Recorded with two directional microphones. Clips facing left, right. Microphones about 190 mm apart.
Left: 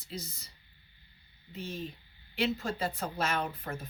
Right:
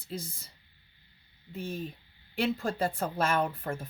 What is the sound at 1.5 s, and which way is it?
Speech, 50° right (ahead or behind).